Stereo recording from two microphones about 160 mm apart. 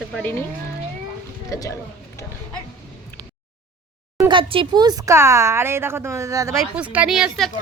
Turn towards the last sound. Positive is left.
turn(degrees=0)  # may be behind; listen again after turning